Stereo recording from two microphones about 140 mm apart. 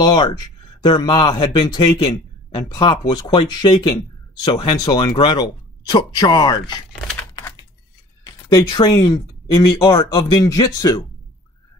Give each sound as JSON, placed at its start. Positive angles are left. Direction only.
{"t": 0.0, "sound": "speech", "side_deg": 30}
{"t": 7.3, "sound": "typing", "side_deg": 25}
{"t": 8.2, "sound": "speech", "side_deg": 30}